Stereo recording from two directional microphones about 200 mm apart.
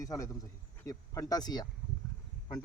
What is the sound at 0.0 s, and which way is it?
Speech, 15° left (ahead or behind).